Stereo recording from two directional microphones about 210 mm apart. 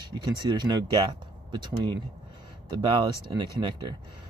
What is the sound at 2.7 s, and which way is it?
Speech, 25° right (ahead or behind).